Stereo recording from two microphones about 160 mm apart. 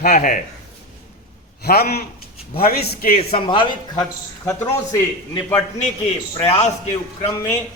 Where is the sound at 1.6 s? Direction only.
75° left (ahead or behind).